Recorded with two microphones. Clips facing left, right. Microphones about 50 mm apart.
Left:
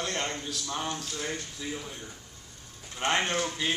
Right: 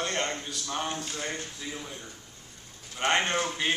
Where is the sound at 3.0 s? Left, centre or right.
Centre.